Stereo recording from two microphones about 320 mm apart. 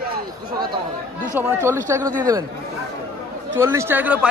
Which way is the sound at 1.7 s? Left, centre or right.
Centre.